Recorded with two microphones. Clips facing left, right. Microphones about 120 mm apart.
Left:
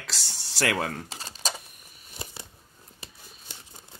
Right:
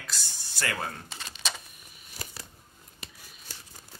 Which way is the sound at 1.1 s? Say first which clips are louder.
Left 3 dB; 35° left (ahead or behind).